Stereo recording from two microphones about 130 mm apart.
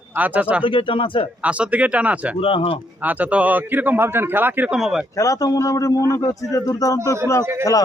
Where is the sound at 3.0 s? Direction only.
10° right (ahead or behind).